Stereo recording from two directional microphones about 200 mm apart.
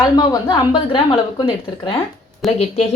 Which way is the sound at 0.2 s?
20° left (ahead or behind).